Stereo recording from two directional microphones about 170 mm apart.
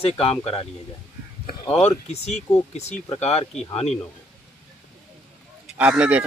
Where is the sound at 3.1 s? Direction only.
40° left (ahead or behind).